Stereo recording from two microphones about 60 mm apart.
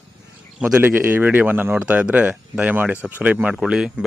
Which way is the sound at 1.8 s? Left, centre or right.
Right.